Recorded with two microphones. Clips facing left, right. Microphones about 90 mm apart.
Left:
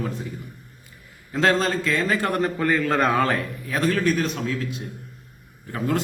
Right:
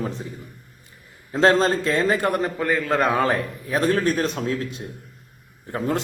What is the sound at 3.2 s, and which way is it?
Speech, 20° right (ahead or behind).